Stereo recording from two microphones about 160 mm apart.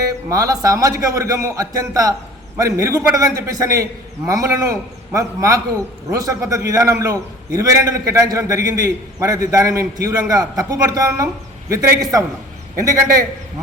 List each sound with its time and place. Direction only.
0.3 s a man's voice: 20° right (ahead or behind)